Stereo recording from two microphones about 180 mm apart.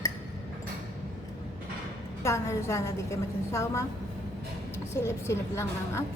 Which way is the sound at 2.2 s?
15° left (ahead or behind).